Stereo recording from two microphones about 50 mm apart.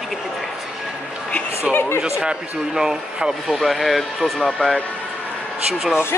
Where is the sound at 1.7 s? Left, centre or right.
Left.